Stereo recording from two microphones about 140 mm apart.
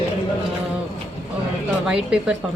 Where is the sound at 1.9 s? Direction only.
5° right (ahead or behind).